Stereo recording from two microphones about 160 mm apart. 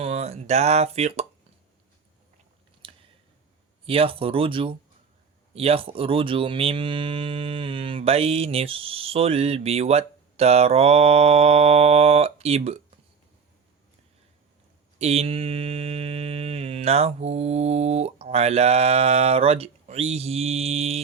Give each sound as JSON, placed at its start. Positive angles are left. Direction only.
{"t": 0.0, "sound": "speech", "side_deg": -40}
{"t": 2.8, "sound": "a sound", "side_deg": -35}
{"t": 3.8, "sound": "speech", "side_deg": -35}
{"t": 14.9, "sound": "mantra", "side_deg": -40}